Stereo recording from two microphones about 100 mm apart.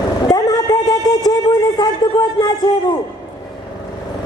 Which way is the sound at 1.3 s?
40° left (ahead or behind).